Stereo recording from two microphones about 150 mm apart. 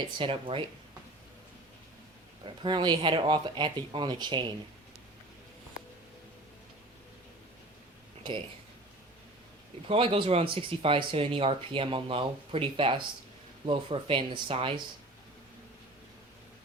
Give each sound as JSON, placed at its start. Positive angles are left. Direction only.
{"t": 0.2, "sound": "speech", "side_deg": -35}
{"t": 2.6, "sound": "speech", "side_deg": -30}
{"t": 9.9, "sound": "speech", "side_deg": -35}